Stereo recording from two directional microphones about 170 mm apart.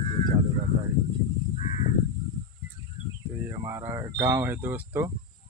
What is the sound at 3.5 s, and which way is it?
Speech, 20° right (ahead or behind).